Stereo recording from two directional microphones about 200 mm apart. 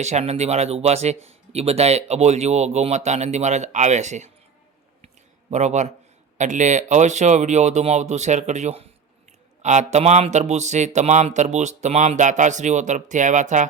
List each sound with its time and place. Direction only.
0.0 s speech: 35° right (ahead or behind)
5.0 s a sound: 35° right (ahead or behind)
6.3 s speech: 35° right (ahead or behind)